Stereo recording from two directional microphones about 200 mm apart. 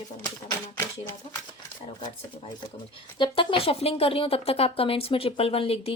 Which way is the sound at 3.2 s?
25° left (ahead or behind).